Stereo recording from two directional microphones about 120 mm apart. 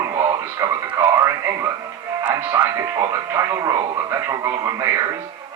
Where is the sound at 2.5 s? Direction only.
30° right (ahead or behind).